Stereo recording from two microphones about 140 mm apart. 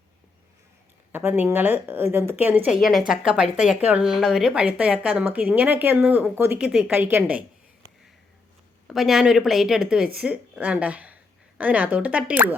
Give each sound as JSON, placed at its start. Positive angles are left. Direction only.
{"t": 1.1, "sound": "speech", "side_deg": -15}
{"t": 2.6, "sound": "a woman's voice", "side_deg": 0}
{"t": 6.6, "sound": "speech", "side_deg": -5}
{"t": 8.9, "sound": "a woman's voice", "side_deg": 0}